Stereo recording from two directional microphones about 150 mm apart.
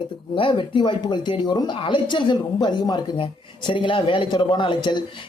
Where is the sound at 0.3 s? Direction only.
35° left (ahead or behind).